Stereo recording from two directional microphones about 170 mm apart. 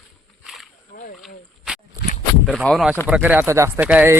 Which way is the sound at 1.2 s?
Centre (ahead or behind).